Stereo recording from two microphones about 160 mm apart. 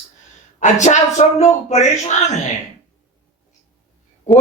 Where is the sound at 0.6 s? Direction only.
50° left (ahead or behind).